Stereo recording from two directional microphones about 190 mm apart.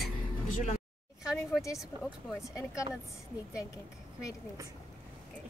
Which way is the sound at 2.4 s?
15° left (ahead or behind).